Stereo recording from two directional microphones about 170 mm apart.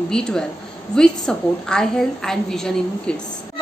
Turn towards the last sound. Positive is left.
turn(degrees=5)  # may be behind; listen again after turning